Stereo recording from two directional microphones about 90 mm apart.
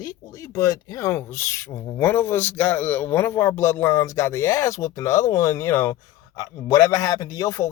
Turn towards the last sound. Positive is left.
turn(degrees=35)  # may be behind; listen again after turning